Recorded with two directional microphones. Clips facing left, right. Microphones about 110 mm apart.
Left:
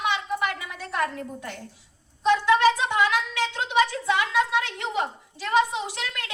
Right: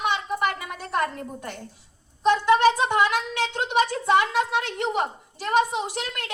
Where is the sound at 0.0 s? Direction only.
45° right (ahead or behind).